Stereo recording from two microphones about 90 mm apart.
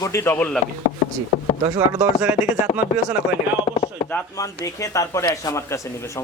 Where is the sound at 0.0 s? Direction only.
35° left (ahead or behind).